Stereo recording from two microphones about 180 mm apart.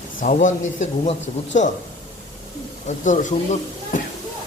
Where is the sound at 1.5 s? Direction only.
45° left (ahead or behind).